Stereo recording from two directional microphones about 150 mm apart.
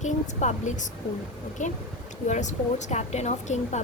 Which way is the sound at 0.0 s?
50° left (ahead or behind).